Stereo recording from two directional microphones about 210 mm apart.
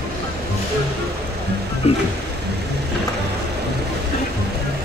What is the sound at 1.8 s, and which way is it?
Speech, 30° left (ahead or behind).